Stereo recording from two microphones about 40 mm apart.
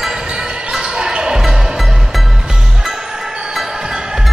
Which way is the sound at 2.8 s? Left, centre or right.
Centre.